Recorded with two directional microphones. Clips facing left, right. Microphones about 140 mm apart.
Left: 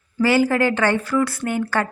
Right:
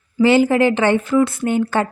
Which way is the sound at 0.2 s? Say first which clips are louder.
Right 4 dB; 20° right (ahead or behind).